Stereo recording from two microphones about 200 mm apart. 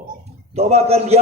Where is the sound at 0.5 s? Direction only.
30° right (ahead or behind).